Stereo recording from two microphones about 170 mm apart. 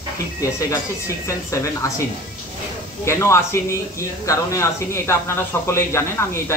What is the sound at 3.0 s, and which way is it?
Speech, 15° left (ahead or behind).